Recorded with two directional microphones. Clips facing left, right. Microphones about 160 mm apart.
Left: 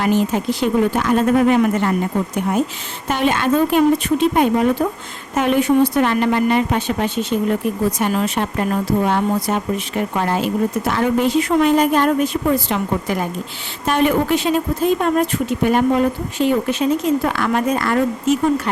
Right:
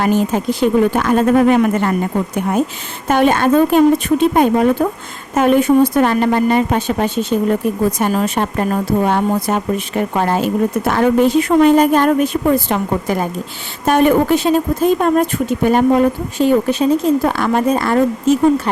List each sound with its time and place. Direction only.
0.0 s speech: 45° right (ahead or behind)
3.1 s speech: 50° right (ahead or behind); by 18.7 s 30° right (ahead or behind)